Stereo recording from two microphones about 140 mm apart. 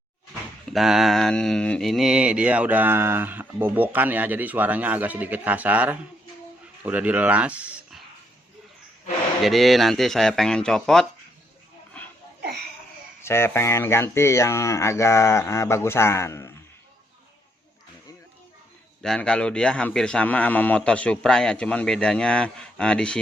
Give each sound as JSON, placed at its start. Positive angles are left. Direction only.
{"t": 0.6, "sound": "speech", "side_deg": 0}
{"t": 9.4, "sound": "a man's voice", "side_deg": 0}
{"t": 11.9, "sound": "a sound", "side_deg": 10}
{"t": 13.2, "sound": "speech", "side_deg": 15}
{"t": 19.0, "sound": "a man's voice", "side_deg": 5}